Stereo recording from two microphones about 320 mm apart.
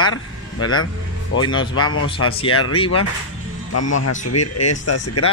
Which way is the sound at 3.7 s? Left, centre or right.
Left.